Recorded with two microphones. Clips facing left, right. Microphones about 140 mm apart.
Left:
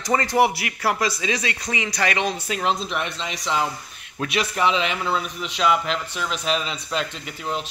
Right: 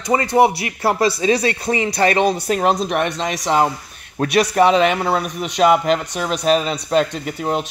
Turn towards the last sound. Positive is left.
turn(degrees=-50)  # may be behind; listen again after turning